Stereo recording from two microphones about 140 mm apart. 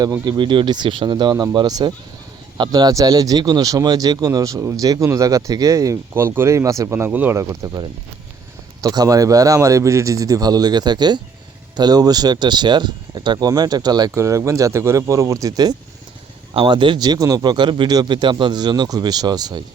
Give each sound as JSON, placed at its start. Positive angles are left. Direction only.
{"t": 0.0, "sound": "a man's voice", "side_deg": -30}